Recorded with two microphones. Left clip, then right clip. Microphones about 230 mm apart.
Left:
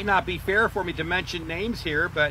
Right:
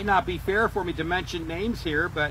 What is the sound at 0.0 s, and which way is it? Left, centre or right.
Speech, left.